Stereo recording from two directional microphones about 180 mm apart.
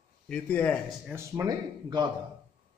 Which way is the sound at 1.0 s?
15° right (ahead or behind).